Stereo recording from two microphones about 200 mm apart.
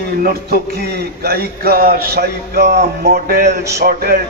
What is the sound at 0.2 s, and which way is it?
Speech, 50° right (ahead or behind).